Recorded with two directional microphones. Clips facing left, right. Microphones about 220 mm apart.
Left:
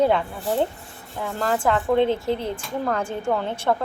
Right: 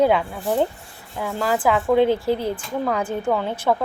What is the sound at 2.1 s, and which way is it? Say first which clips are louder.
Speech: right 3 dB; 25° left (ahead or behind).